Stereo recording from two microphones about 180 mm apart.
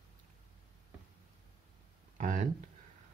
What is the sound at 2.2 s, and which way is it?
Speech, 45° right (ahead or behind).